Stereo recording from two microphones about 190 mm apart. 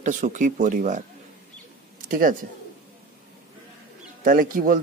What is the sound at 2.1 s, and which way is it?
Speech, 45° right (ahead or behind).